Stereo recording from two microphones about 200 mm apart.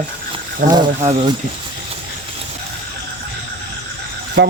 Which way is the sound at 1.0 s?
30° right (ahead or behind).